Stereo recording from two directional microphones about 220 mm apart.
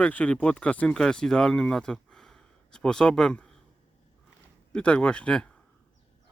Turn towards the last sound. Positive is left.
turn(degrees=5)  # may be behind; listen again after turning